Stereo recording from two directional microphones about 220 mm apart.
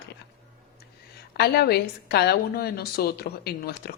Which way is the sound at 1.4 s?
45° left (ahead or behind).